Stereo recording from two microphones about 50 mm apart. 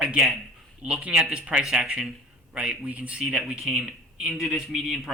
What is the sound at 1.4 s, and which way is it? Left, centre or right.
A man's voice, right.